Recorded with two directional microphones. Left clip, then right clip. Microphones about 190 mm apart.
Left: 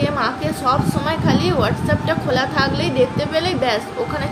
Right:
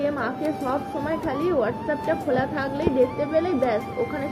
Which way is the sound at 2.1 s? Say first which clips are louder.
Left 4 dB; 25° left (ahead or behind).